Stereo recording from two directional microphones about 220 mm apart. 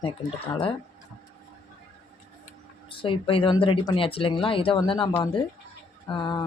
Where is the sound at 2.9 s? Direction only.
25° left (ahead or behind).